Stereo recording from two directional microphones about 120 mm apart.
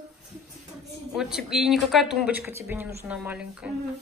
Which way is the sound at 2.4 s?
20° right (ahead or behind).